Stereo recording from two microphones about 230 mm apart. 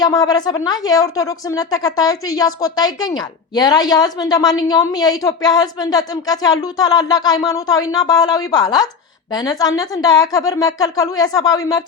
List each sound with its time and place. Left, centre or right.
0.0 s speech: centre